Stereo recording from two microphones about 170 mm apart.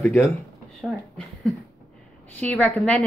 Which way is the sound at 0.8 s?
Centre (ahead or behind).